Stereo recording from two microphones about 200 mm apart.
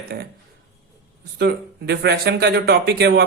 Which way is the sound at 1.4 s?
55° right (ahead or behind).